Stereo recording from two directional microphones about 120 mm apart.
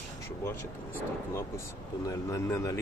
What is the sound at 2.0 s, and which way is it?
Speech, 25° left (ahead or behind).